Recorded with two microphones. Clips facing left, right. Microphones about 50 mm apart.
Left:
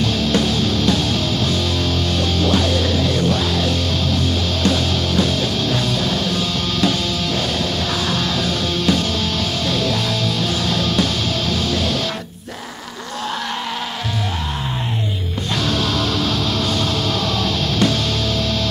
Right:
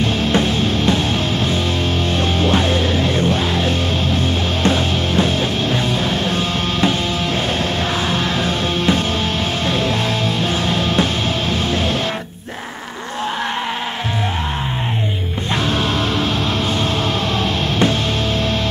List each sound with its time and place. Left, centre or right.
0.0 s music: right
2.1 s music: right
8.1 s music: right
10.7 s a sound: right
15.7 s music: right
17.4 s music: right